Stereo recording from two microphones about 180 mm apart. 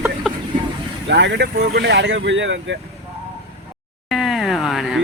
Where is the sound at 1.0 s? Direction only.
85° right.